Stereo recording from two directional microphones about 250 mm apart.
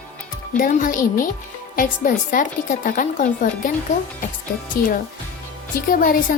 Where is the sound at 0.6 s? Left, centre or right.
Left.